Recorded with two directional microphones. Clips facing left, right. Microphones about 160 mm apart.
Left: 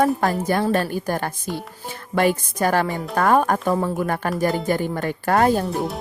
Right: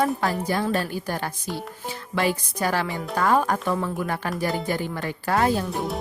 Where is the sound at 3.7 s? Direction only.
40° left (ahead or behind).